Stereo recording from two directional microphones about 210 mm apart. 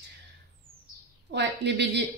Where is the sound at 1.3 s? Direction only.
55° right (ahead or behind).